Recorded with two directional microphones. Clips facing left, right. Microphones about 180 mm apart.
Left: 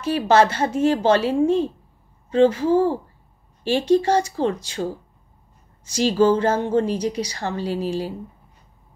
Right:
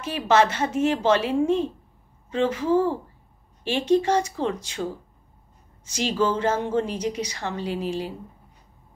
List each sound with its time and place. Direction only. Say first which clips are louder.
0.0 s a woman's voice: left 3 dB; 35° left (ahead or behind)
5.9 s a woman's voice: left 7 dB; 35° left (ahead or behind)